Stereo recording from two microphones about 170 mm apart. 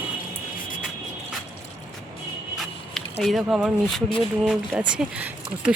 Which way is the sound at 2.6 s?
Centre (ahead or behind).